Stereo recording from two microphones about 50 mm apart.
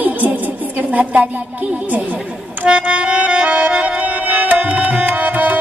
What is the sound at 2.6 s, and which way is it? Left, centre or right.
Music, centre.